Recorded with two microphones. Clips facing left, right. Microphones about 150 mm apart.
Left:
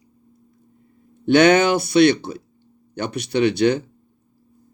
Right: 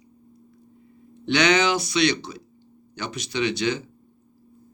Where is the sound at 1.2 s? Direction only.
50° left (ahead or behind).